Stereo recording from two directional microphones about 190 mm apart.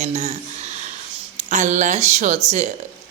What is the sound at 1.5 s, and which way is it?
Mantra, 40° right (ahead or behind).